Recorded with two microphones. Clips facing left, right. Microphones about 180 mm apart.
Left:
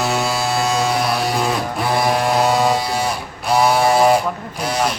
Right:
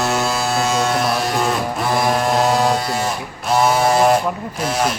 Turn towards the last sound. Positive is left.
turn(degrees=0)  # may be behind; listen again after turning